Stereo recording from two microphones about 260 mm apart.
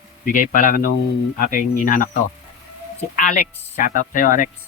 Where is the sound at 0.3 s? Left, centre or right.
Left.